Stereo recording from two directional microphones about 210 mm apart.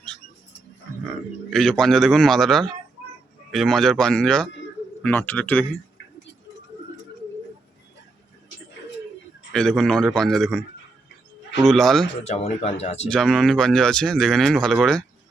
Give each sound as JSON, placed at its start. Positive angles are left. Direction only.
{"t": 1.5, "sound": "speech", "side_deg": 5}
{"t": 9.5, "sound": "speech", "side_deg": 5}
{"t": 11.6, "sound": "speech", "side_deg": 0}
{"t": 12.2, "sound": "speech", "side_deg": 30}
{"t": 13.1, "sound": "speech", "side_deg": 0}